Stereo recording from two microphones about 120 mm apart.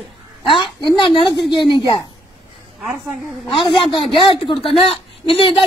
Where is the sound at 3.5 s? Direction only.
45° left (ahead or behind).